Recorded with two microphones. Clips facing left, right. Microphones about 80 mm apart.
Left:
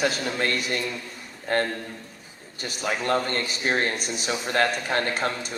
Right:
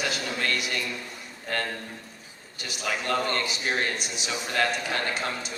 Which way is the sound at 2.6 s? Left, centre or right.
Left.